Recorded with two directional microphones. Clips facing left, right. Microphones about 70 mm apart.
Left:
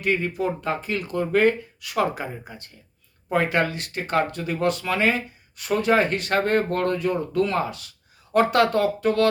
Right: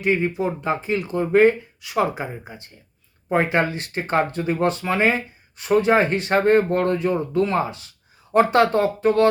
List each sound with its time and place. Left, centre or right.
0.0 s speech: right